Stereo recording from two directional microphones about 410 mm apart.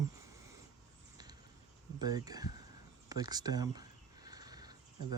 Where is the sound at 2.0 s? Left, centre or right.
Centre.